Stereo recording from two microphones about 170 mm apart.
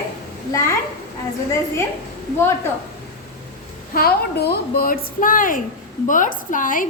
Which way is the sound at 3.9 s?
65° left (ahead or behind).